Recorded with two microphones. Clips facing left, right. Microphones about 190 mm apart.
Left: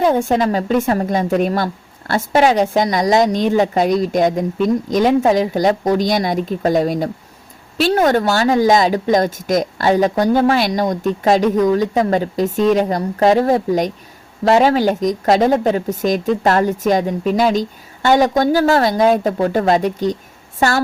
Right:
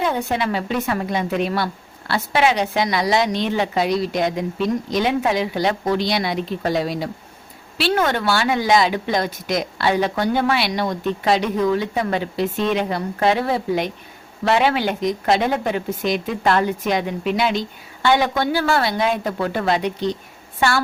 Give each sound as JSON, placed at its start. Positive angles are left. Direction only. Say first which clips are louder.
{"t": 0.0, "sound": "a woman's voice", "louder": "left 7 dB", "side_deg": 45}